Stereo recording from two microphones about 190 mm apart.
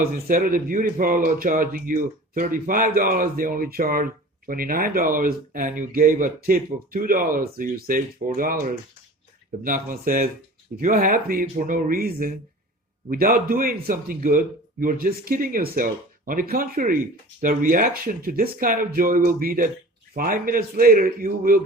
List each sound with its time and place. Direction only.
0.0 s speech: 45° right (ahead or behind)
9.6 s speech: 45° right (ahead or behind)